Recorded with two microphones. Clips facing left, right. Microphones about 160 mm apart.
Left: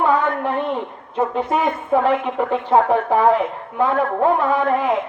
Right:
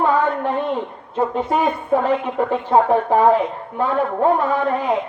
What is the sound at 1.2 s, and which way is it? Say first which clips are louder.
A woman's voice: even; 35° right (ahead or behind).